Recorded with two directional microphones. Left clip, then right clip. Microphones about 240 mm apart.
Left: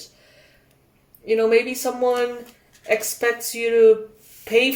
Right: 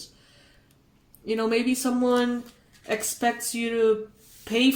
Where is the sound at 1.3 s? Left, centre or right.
Right.